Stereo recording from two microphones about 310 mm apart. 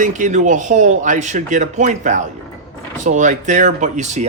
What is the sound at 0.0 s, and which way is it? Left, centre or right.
Speech, right.